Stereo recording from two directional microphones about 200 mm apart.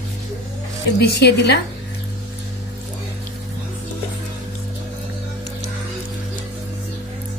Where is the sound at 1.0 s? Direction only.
55° left (ahead or behind).